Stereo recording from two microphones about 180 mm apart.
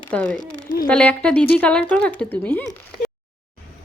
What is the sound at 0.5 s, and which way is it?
Speech, 50° left (ahead or behind).